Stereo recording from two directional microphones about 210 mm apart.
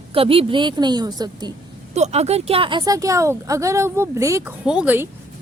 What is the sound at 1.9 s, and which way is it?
Speech, 30° right (ahead or behind).